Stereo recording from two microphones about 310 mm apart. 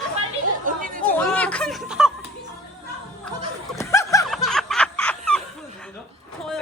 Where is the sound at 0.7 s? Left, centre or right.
Right.